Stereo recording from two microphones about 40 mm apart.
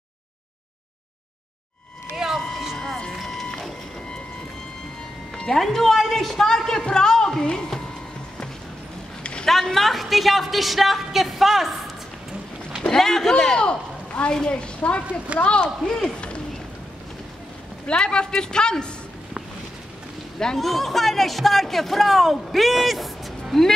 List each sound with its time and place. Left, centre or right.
2.2 s vehicle: centre
3.1 s vehicle: centre
5.6 s a woman's voice: centre
9.2 s a sound: left
9.5 s speech: centre
12.9 s a woman's voice: centre
13.4 s a man's voice: left
14.8 s a man's voice: left
17.8 s a man's voice: left
20.5 s speech: centre